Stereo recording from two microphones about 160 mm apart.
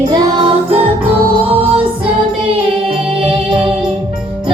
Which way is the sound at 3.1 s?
35° right (ahead or behind).